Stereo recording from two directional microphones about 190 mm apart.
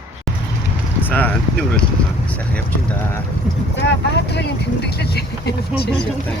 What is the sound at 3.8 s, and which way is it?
Speech, 65° left (ahead or behind).